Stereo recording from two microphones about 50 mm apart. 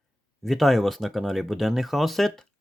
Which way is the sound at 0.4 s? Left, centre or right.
Centre.